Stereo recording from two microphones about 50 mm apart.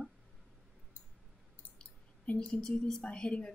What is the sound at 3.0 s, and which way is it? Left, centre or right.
Speech, left.